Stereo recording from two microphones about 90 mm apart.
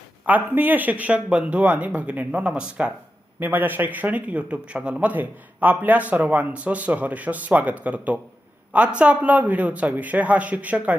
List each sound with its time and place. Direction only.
0.3 s a man's voice: 20° right (ahead or behind)